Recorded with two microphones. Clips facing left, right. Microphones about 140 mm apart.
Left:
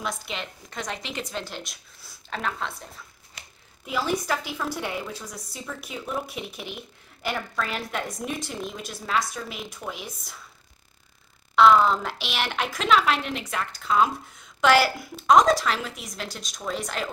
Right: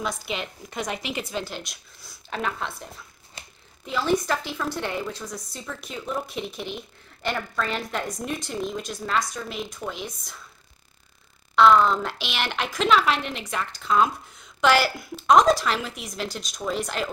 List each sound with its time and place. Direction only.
0.0 s a woman's voice: 5° right (ahead or behind)
3.4 s a sound: 25° right (ahead or behind)
3.8 s a woman's voice: 5° left (ahead or behind)
11.5 s a woman's voice: 5° left (ahead or behind)